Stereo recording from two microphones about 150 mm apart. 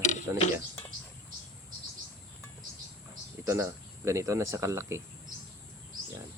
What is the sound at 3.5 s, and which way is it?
Speech, 20° right (ahead or behind).